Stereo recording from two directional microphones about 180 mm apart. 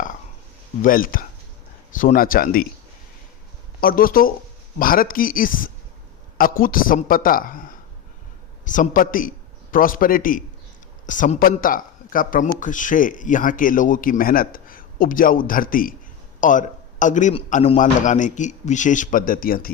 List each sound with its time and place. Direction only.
0.8 s speech: 50° left (ahead or behind)
3.8 s speech: 55° left (ahead or behind)
8.6 s speech: 45° left (ahead or behind)